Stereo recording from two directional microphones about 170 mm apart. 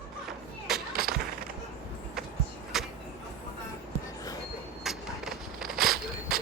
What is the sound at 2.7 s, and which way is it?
Vehicle, centre (ahead or behind).